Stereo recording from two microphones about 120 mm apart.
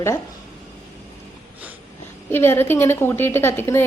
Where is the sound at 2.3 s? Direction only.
20° left (ahead or behind).